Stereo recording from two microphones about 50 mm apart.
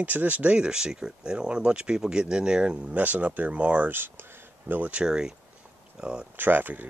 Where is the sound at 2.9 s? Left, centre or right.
Right.